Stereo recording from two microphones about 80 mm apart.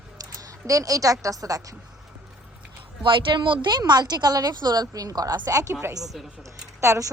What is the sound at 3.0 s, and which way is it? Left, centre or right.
Speech, right.